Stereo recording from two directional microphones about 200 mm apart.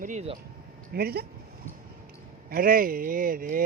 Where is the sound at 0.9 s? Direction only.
50° right (ahead or behind).